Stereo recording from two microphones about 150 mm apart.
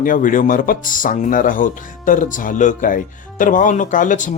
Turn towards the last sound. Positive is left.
turn(degrees=60)  # may be behind; listen again after turning